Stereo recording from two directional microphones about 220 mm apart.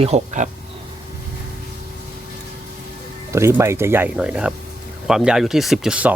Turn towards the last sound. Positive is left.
turn(degrees=-5)  # may be behind; listen again after turning